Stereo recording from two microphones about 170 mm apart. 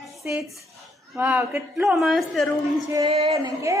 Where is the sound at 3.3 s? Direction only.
20° right (ahead or behind).